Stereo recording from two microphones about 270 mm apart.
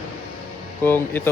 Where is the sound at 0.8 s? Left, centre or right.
Centre.